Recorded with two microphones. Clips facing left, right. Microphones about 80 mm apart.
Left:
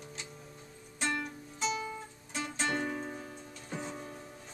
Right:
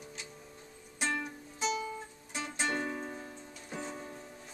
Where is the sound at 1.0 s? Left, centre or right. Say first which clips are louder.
Even; centre.